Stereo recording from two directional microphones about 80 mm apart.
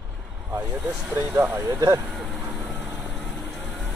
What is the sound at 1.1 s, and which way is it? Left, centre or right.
Speech, right.